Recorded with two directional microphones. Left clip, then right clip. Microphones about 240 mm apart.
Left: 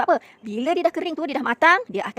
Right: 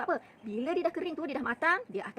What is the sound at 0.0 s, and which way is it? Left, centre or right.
A woman's voice, left.